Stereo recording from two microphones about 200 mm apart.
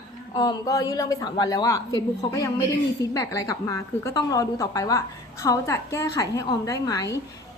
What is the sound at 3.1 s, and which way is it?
A woman's voice, 15° left (ahead or behind).